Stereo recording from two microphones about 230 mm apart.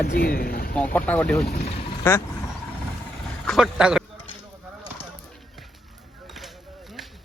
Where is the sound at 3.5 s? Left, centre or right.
Centre.